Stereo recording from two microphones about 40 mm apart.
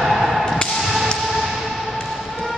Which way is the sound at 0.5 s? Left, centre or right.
Centre.